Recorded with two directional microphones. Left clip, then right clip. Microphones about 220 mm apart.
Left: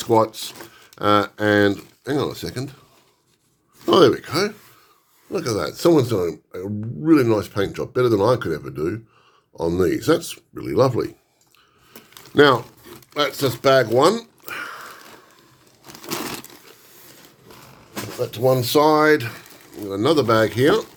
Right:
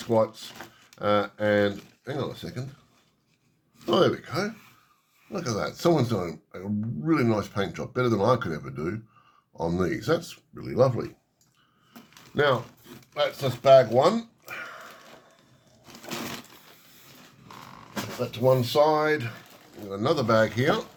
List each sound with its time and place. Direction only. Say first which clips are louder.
0.0 s speech: left 6 dB; 40° left (ahead or behind)
3.8 s speech: left 8 dB; 40° left (ahead or behind)
12.3 s speech: left 9 dB; 45° left (ahead or behind)
18.2 s speech: left 4 dB; 50° left (ahead or behind)
19.9 s speech: left 6 dB; 35° left (ahead or behind)